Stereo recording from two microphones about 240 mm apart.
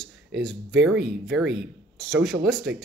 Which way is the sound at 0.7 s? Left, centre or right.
Right.